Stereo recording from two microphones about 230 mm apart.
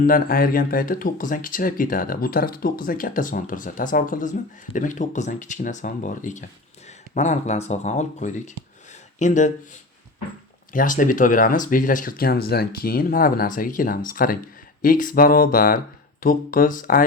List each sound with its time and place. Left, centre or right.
0.0 s speech: left
10.7 s speech: left